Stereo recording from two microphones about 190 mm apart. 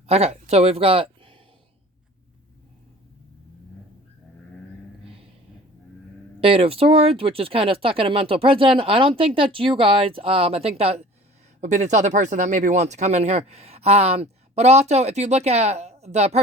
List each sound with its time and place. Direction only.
0.1 s speech: 35° right (ahead or behind)
6.4 s speech: 30° right (ahead or behind)